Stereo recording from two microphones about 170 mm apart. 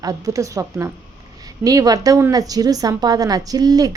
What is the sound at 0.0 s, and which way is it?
A woman's voice, 20° right (ahead or behind).